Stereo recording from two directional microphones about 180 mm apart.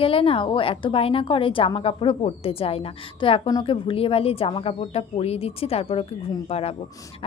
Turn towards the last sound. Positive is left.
turn(degrees=35)  # may be behind; listen again after turning